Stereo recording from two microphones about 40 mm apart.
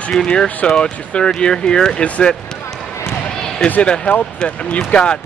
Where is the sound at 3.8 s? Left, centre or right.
Left.